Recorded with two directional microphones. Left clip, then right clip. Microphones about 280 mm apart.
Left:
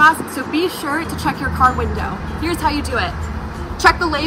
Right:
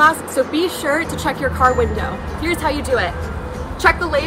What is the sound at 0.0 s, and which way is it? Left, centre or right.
A woman's voice, centre.